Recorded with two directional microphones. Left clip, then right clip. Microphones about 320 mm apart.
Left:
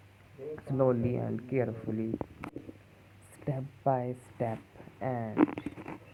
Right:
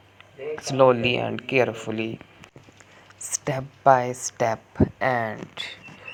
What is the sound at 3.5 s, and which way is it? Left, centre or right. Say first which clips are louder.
Speech: right 13 dB; centre.